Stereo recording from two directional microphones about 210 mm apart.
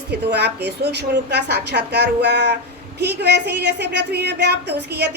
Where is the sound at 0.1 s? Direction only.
50° right (ahead or behind).